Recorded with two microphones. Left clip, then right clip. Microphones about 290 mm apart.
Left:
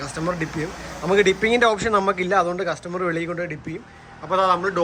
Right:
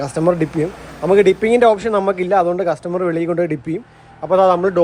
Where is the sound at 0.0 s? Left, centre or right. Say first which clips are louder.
Right 9 dB; centre.